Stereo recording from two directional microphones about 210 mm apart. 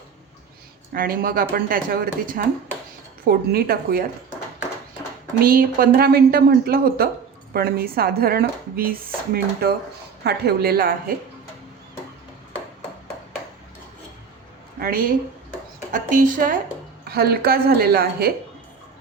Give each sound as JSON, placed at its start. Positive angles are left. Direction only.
{"t": 0.9, "sound": "speech", "side_deg": -45}
{"t": 5.4, "sound": "speech", "side_deg": -45}
{"t": 14.8, "sound": "a sound", "side_deg": -45}
{"t": 15.9, "sound": "a woman's voice", "side_deg": -40}